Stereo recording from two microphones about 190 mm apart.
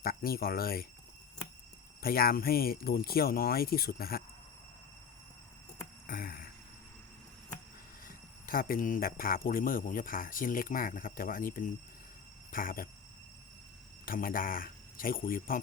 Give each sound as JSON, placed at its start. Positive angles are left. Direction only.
{"t": 0.0, "sound": "speech", "side_deg": 50}
{"t": 2.0, "sound": "speech", "side_deg": 50}
{"t": 6.1, "sound": "a sound", "side_deg": 50}
{"t": 8.0, "sound": "speech", "side_deg": 50}
{"t": 14.0, "sound": "speech", "side_deg": 45}